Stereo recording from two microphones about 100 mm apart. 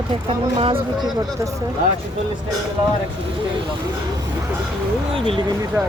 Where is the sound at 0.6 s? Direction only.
65° right (ahead or behind).